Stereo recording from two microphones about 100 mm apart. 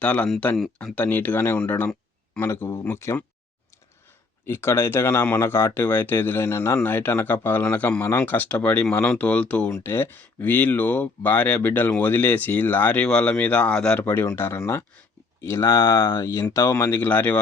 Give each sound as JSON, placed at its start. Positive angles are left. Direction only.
{"t": 0.0, "sound": "speech", "side_deg": 15}
{"t": 4.4, "sound": "speech", "side_deg": 25}
{"t": 9.8, "sound": "speech", "side_deg": 25}